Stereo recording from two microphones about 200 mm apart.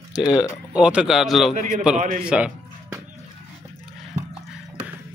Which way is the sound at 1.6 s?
40° right (ahead or behind).